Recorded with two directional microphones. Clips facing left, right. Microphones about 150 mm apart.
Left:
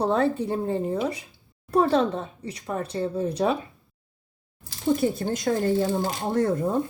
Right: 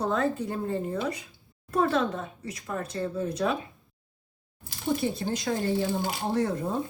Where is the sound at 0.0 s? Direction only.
30° left (ahead or behind).